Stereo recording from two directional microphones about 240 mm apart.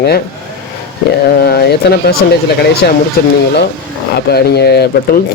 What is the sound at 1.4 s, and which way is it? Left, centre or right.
Speech, left.